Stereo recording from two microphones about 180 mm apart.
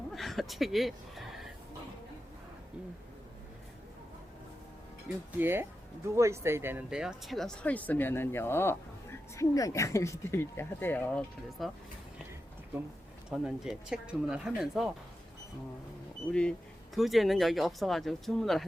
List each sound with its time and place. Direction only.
0.1 s speech: centre (ahead or behind)
5.4 s speech: 10° right (ahead or behind)
13.3 s speech: 5° right (ahead or behind)
16.3 s speech: 5° left (ahead or behind)